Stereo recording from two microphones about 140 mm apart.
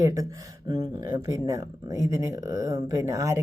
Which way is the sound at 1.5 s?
25° right (ahead or behind).